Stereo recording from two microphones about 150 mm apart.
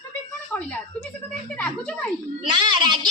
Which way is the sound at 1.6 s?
5° left (ahead or behind).